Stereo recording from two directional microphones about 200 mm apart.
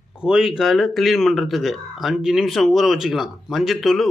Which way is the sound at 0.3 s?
Centre (ahead or behind).